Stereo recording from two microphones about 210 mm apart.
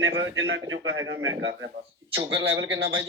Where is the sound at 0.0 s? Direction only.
65° right (ahead or behind).